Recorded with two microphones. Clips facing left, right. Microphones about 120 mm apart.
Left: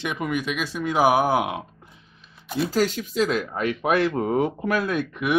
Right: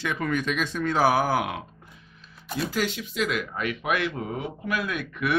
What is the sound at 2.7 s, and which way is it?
Speech, 40° left (ahead or behind).